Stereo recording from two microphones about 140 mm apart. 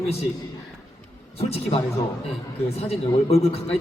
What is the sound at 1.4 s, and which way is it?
Speech, 45° left (ahead or behind).